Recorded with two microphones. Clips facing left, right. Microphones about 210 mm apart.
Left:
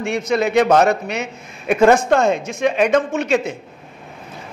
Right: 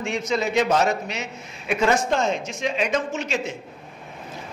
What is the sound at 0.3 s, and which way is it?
A man's voice, 60° left (ahead or behind).